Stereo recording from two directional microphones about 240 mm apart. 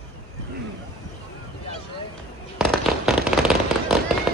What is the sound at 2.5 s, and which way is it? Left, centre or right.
Fireworks, centre.